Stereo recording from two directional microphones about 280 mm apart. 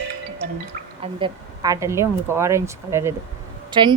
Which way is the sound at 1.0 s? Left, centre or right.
Centre.